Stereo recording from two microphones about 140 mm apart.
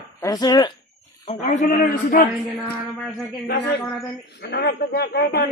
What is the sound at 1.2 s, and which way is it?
A man's voice, 60° left (ahead or behind).